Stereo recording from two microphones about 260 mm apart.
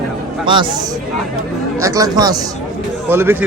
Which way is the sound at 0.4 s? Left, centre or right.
Centre.